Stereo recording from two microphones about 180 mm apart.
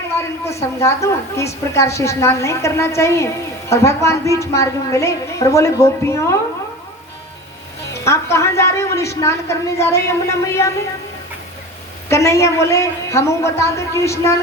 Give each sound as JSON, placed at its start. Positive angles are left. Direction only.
{"t": 0.2, "sound": "a woman's voice", "side_deg": 15}
{"t": 7.9, "sound": "a woman's voice", "side_deg": 15}
{"t": 12.0, "sound": "a woman's voice", "side_deg": 15}